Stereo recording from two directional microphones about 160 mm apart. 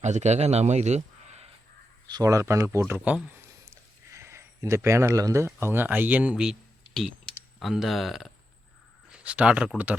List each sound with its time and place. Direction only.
0.0 s speech: 45° right (ahead or behind)
2.0 s speech: 25° right (ahead or behind)